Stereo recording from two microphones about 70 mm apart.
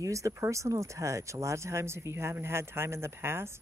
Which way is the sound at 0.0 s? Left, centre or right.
Right.